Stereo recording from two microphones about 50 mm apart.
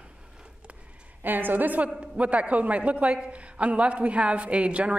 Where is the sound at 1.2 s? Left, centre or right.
Right.